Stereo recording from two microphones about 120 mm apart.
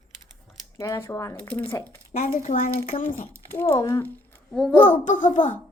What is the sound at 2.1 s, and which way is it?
Speech, 70° left (ahead or behind).